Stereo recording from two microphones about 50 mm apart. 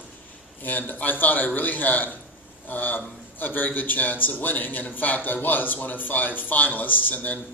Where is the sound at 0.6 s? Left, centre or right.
Left.